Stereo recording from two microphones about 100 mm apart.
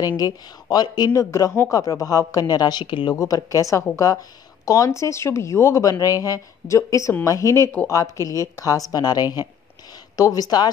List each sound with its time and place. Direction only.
0.0 s speech: 40° left (ahead or behind)
3.2 s speech: 35° left (ahead or behind)